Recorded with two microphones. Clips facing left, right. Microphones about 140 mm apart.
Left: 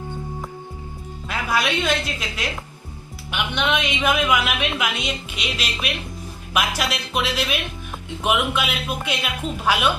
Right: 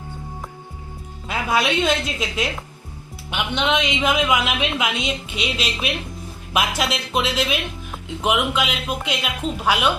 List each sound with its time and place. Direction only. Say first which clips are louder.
1.3 s a woman's voice: right 2 dB; 25° right (ahead or behind)